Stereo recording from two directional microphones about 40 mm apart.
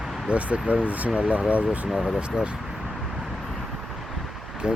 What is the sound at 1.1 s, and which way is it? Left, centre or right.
Speech, right.